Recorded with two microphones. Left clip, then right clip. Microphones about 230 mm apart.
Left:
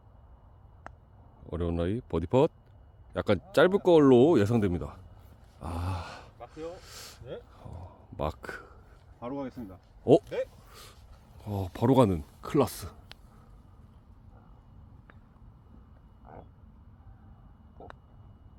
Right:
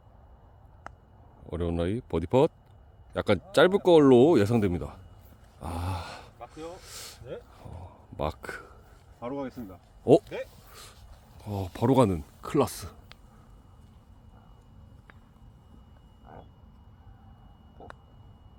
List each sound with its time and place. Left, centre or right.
0.9 s a sound: centre
1.5 s speech: centre
5.5 s gasp: centre
9.2 s speech: centre
10.0 s speech: centre
10.2 s speech: left
10.7 s a sound: centre
11.4 s speech: centre
16.2 s frog: centre
17.8 s a sound: centre